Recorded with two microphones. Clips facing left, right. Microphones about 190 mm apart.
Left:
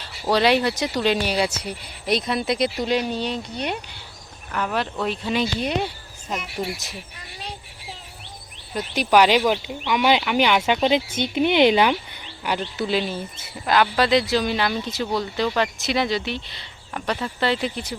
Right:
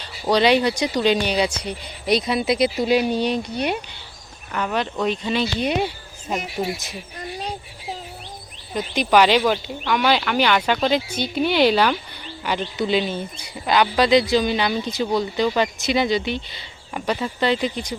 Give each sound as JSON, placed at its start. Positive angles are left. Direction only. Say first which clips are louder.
{"t": 0.0, "sound": "speech", "louder": "right 2 dB", "side_deg": 5}
{"t": 4.5, "sound": "speech", "louder": "right 1 dB", "side_deg": 5}
{"t": 5.5, "sound": "speech", "louder": "right 2 dB", "side_deg": -5}
{"t": 7.2, "sound": "a sound", "louder": "right 12 dB", "side_deg": -40}
{"t": 8.7, "sound": "speech", "louder": "right 1 dB", "side_deg": 5}
{"t": 12.5, "sound": "speech", "louder": "right 2 dB", "side_deg": 5}